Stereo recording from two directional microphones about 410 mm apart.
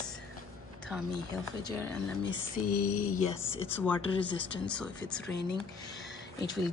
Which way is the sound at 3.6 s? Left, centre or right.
Centre.